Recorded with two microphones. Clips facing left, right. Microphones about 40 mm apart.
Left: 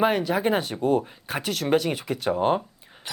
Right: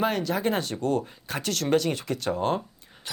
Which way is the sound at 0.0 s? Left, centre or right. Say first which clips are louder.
Left 3 dB; centre.